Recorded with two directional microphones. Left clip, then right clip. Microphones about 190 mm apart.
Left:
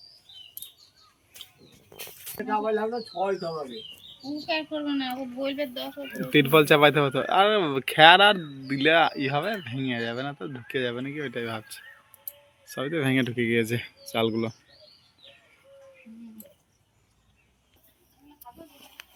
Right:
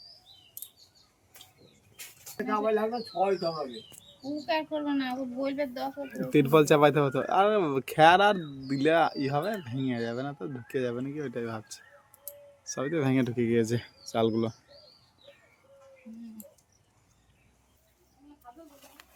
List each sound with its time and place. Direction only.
2.2 s speech: centre (ahead or behind)
4.4 s a woman's voice: 15° right (ahead or behind)
5.1 s speech: centre (ahead or behind)
12.7 s speech: 5° right (ahead or behind)